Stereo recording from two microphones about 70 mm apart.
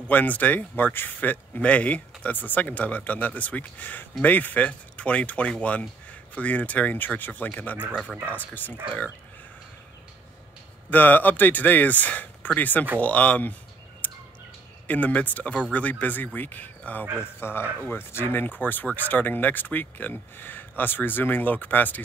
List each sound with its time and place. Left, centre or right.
0.1 s speech: left
10.9 s speech: left
14.9 s speech: left